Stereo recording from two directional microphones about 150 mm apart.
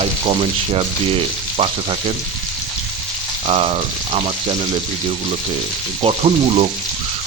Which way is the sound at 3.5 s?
40° right (ahead or behind).